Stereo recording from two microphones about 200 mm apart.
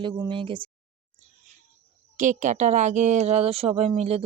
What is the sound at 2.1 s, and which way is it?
A woman's voice, 40° right (ahead or behind).